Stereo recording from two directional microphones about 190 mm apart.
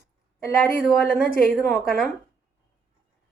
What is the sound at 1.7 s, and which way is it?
Speech, centre (ahead or behind).